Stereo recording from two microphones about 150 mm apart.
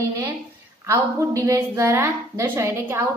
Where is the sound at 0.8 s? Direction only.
20° right (ahead or behind).